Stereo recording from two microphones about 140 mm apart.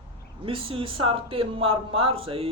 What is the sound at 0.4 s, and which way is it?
Speech, 40° right (ahead or behind).